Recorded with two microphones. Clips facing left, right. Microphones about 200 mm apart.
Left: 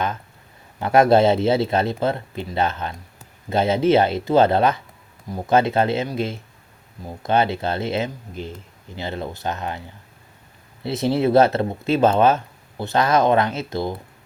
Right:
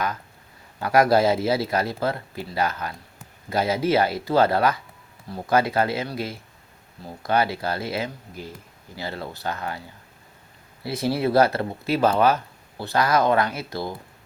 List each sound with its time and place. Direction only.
0.8 s speech: 25° left (ahead or behind)
10.8 s speech: 25° left (ahead or behind)